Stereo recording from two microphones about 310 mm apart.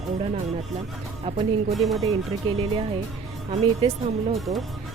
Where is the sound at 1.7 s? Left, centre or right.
Centre.